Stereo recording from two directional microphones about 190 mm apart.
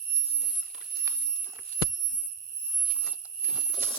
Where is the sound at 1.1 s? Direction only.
15° right (ahead or behind).